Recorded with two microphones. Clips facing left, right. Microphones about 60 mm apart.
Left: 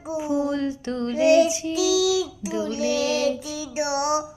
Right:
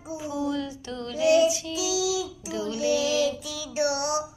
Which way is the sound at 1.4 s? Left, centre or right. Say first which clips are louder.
Right 1 dB; left.